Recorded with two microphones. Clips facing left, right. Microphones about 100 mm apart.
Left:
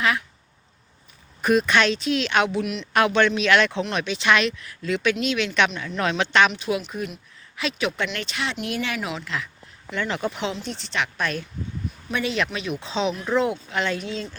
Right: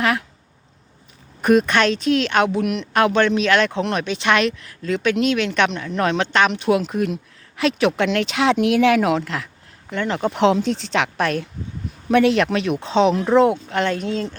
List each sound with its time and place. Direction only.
1.4 s speech: 50° right (ahead or behind)
2.9 s speech: 40° right (ahead or behind)
6.5 s speech: 55° right (ahead or behind); by 9.0 s 90° right
9.0 s speech: 60° right (ahead or behind)
9.9 s speech: 45° right (ahead or behind)
10.3 s speech: 75° right (ahead or behind); by 14.3 s 50° right (ahead or behind)